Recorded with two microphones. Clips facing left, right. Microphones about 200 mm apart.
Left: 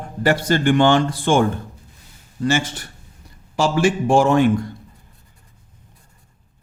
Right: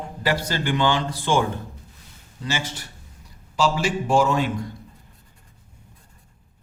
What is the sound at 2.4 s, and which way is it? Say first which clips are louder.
Speech: left 9 dB; 50° left (ahead or behind).